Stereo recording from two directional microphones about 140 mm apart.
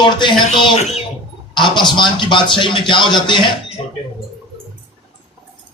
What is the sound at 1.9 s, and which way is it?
A man's voice, 35° left (ahead or behind).